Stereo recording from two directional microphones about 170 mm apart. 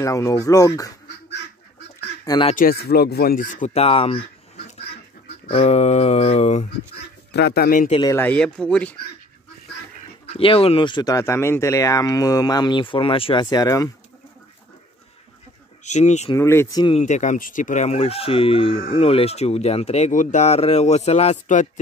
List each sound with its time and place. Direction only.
0.0 s speech: 20° left (ahead or behind)
2.2 s speech: 25° left (ahead or behind)
2.5 s speech: 60° left (ahead or behind); by 4.2 s 35° left (ahead or behind)
5.5 s speech: 35° left (ahead or behind)
7.3 s speech: 70° left (ahead or behind)
8.1 s speech: 10° left (ahead or behind)
10.2 s speech: 35° left (ahead or behind)
15.8 s speech: 45° left (ahead or behind)
16.3 s speech: 15° left (ahead or behind)
16.8 s speech: 40° left (ahead or behind)